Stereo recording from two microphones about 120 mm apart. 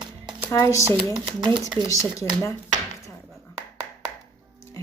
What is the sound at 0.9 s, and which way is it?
Speech, 40° right (ahead or behind).